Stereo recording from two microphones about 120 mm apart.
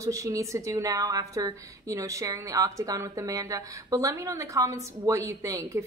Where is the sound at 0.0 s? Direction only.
25° right (ahead or behind).